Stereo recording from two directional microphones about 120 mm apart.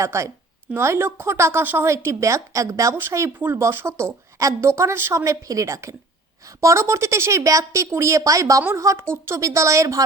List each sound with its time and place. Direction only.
0.0 s a woman's voice: 25° right (ahead or behind)